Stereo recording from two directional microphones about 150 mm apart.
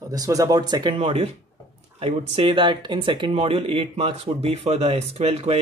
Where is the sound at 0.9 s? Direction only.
40° right (ahead or behind).